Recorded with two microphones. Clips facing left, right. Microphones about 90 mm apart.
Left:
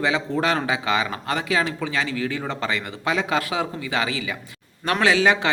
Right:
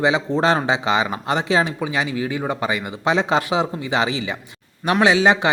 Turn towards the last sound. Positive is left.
turn(degrees=-20)  # may be behind; listen again after turning